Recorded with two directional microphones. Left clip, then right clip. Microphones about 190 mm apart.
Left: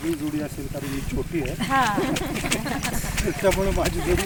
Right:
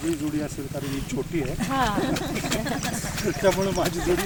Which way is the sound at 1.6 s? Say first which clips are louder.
Left 4 dB; 45° right (ahead or behind).